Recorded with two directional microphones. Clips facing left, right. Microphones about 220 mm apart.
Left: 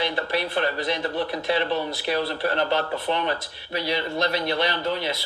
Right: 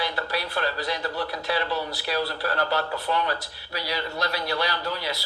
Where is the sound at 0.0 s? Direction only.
20° left (ahead or behind).